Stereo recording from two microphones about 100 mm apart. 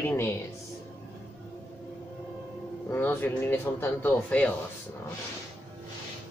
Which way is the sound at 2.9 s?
20° left (ahead or behind).